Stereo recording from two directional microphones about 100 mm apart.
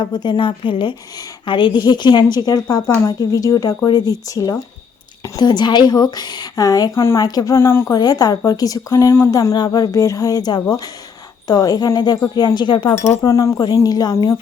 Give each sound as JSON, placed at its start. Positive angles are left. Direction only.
{"t": 0.0, "sound": "a woman's voice", "side_deg": 50}
{"t": 7.5, "sound": "speech", "side_deg": 25}
{"t": 7.9, "sound": "speech", "side_deg": 40}
{"t": 13.2, "sound": "speech", "side_deg": 35}